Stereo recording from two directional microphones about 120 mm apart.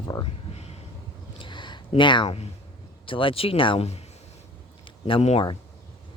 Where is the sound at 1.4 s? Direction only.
40° left (ahead or behind).